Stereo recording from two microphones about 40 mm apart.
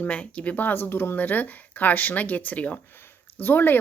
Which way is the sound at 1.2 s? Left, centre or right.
Left.